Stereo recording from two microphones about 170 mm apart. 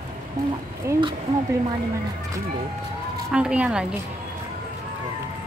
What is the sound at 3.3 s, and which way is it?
Speech, 5° right (ahead or behind).